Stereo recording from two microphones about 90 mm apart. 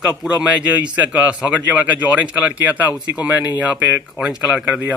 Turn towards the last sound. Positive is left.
turn(degrees=-15)  # may be behind; listen again after turning